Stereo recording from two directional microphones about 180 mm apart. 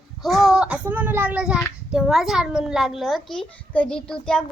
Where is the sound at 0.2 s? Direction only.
Centre (ahead or behind).